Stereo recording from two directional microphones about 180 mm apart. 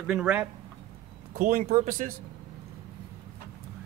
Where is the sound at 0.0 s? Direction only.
5° right (ahead or behind).